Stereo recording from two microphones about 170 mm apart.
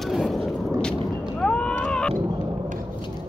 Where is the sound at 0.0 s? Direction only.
Centre (ahead or behind).